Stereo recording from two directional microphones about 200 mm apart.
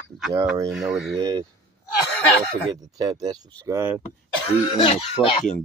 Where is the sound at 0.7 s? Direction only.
Centre (ahead or behind).